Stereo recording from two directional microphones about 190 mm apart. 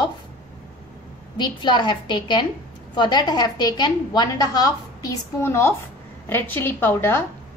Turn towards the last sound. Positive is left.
turn(degrees=10)  # may be behind; listen again after turning